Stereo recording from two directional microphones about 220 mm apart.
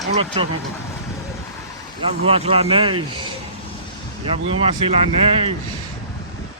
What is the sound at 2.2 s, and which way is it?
Speech, 25° right (ahead or behind).